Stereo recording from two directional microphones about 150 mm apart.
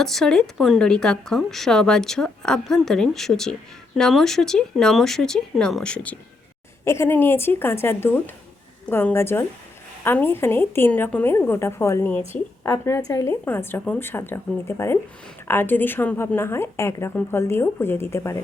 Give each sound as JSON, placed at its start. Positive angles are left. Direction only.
{"t": 0.0, "sound": "a woman's voice", "side_deg": 0}